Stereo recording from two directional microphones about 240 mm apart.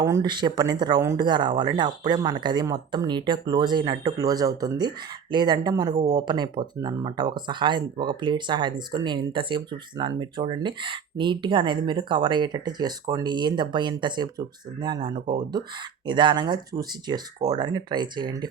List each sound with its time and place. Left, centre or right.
0.0 s speech: centre